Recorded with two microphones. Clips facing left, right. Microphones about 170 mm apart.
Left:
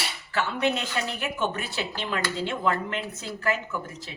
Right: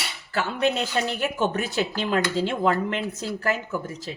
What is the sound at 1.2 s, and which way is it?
Speech, 40° right (ahead or behind).